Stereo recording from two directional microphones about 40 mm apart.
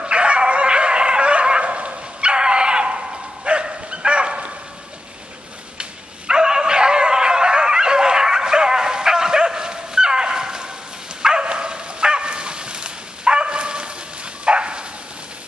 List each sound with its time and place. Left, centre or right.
0.0 s bow-wow: right
5.8 s dog: centre